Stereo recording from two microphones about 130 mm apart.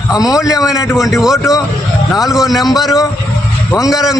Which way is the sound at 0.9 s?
Centre (ahead or behind).